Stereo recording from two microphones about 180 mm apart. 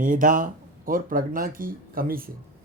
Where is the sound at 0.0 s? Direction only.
50° right (ahead or behind).